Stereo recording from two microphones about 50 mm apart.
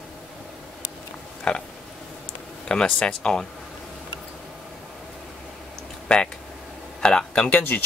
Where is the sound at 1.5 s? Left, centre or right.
Centre.